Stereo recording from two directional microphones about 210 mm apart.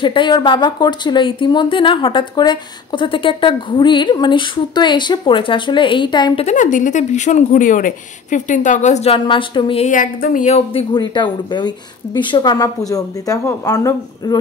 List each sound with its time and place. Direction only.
0.0 s speech: 25° left (ahead or behind)
6.4 s speech: 35° left (ahead or behind); by 14.4 s 15° left (ahead or behind)